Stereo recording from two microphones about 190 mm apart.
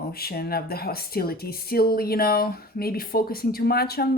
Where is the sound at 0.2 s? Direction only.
55° left (ahead or behind).